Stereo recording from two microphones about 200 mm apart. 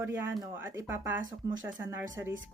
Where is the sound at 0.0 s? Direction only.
10° right (ahead or behind).